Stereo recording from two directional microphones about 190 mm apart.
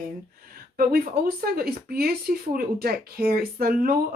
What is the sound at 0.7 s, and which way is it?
Speech, 50° right (ahead or behind).